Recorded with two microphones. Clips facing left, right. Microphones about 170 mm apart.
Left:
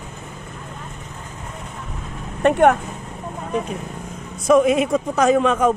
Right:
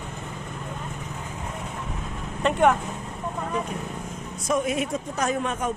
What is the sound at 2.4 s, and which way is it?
Speech, 60° left (ahead or behind).